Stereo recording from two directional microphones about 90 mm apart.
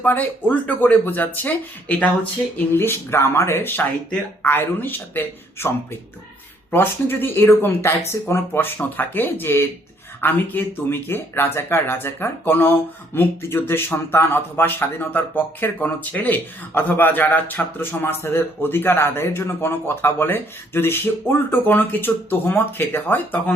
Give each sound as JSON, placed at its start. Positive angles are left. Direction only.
{"t": 0.0, "sound": "speech", "side_deg": 20}